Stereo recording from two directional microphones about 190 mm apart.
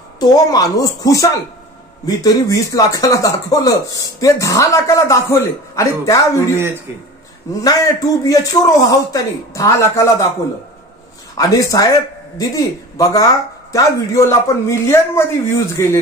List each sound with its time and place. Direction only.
0.2 s speech: 20° left (ahead or behind)
7.6 s speech: 20° left (ahead or behind)
11.3 s speech: 20° left (ahead or behind)